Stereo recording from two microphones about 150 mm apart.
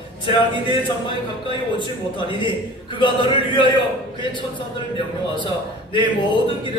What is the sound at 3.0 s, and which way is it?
Speech, 35° left (ahead or behind).